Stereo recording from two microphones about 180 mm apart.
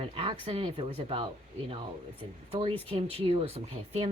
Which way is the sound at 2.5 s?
30° right (ahead or behind).